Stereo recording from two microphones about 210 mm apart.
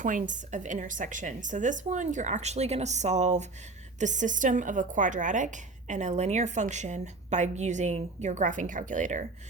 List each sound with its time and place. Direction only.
0.0 s speech: 35° right (ahead or behind)